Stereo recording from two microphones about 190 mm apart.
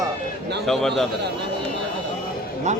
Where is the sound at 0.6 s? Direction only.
Centre (ahead or behind).